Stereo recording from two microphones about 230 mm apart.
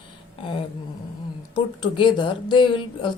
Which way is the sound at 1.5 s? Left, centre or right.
Left.